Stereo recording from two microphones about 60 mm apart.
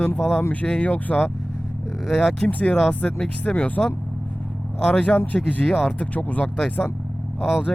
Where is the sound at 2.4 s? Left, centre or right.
Left.